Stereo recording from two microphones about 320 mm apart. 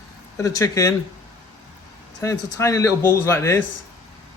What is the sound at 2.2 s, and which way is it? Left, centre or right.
Speech, centre.